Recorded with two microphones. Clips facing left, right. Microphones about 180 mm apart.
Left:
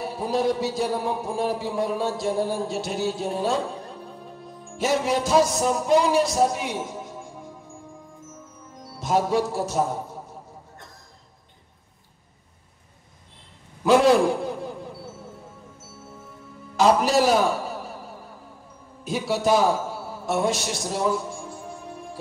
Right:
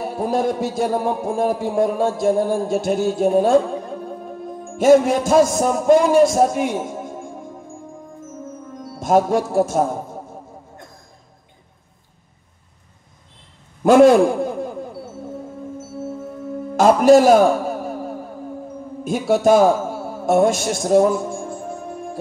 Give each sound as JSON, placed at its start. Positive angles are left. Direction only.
{"t": 0.0, "sound": "a man's voice", "side_deg": -50}
{"t": 8.8, "sound": "speech", "side_deg": -50}
{"t": 13.8, "sound": "a man's voice", "side_deg": -50}
{"t": 16.7, "sound": "music", "side_deg": -50}
{"t": 19.0, "sound": "a sound", "side_deg": -50}